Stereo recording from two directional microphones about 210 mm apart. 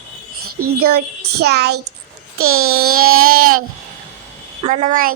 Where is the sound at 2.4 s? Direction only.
85° right.